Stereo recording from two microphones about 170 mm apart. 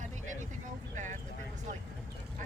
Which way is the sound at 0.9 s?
45° right (ahead or behind).